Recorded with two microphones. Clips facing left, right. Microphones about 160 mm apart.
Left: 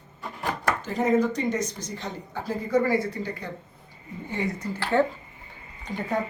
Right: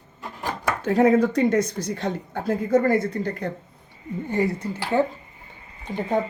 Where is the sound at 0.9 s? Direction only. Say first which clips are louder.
Right 6 dB; 65° right (ahead or behind); by 3.1 s 50° right (ahead or behind).